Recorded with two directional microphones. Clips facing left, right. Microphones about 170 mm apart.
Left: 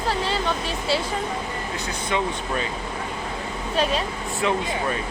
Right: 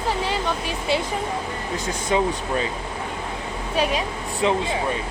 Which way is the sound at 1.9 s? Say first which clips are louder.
Right 4 dB; 40° right (ahead or behind).